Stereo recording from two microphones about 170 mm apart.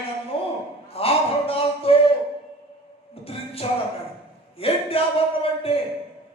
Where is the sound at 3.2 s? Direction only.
35° left (ahead or behind).